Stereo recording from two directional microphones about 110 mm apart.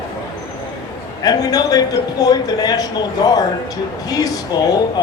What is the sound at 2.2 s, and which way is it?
A man's voice, 35° left (ahead or behind).